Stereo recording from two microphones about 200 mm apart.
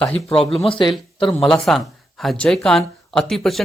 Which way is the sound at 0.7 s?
25° left (ahead or behind).